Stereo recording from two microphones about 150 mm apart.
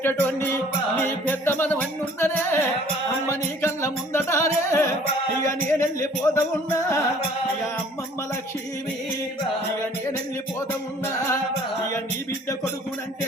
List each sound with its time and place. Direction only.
0.0 s music: 15° left (ahead or behind)